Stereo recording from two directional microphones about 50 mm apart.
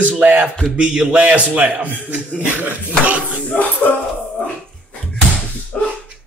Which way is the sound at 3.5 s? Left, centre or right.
Left.